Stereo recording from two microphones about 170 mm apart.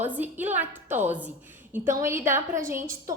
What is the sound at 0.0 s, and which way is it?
A woman's voice, 10° right (ahead or behind).